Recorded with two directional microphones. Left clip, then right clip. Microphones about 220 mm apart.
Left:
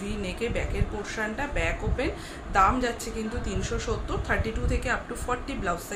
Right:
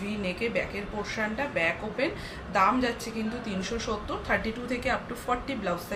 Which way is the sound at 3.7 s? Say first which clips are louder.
Left 1 dB; 15° left (ahead or behind).